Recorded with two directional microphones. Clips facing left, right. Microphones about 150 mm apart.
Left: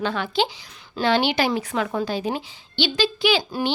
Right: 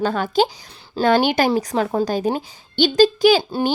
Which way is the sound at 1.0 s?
45° right (ahead or behind).